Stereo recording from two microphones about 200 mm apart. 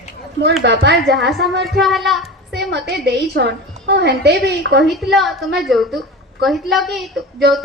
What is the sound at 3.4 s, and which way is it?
A woman's voice, 60° right (ahead or behind).